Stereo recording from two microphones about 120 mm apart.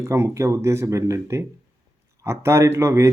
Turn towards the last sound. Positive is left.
turn(degrees=-25)  # may be behind; listen again after turning